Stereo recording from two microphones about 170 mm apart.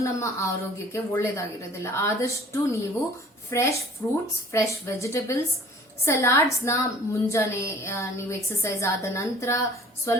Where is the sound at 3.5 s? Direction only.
20° left (ahead or behind).